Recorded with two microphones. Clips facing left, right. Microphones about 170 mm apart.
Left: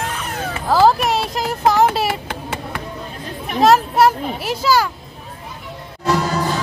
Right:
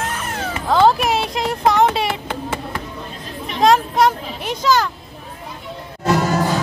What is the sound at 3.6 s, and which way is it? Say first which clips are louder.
A child's voice: left 1 dB; 5° left (ahead or behind).